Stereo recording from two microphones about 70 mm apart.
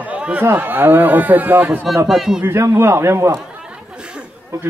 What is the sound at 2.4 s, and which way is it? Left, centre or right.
A man's voice, right.